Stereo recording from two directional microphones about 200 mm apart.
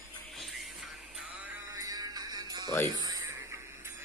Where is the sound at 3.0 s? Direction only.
20° right (ahead or behind).